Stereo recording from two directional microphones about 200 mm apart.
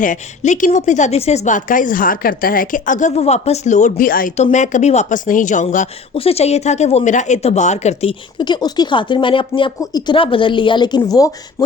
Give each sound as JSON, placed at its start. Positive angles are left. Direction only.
{"t": 0.0, "sound": "a woman's voice", "side_deg": 40}
{"t": 8.4, "sound": "speech", "side_deg": 20}